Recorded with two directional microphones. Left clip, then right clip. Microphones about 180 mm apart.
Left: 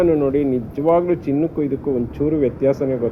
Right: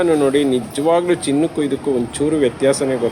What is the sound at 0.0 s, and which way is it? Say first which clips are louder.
Speech: right 2 dB; 20° right (ahead or behind).